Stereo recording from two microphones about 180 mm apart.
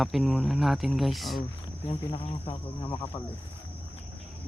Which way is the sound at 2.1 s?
30° left (ahead or behind).